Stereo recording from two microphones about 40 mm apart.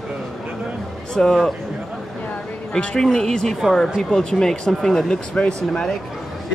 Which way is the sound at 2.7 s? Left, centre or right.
Left.